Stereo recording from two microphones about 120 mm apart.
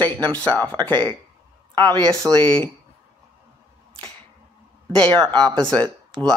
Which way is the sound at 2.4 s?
10° left (ahead or behind).